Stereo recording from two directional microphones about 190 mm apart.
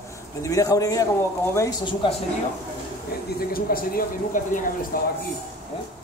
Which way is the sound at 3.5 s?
50° left (ahead or behind).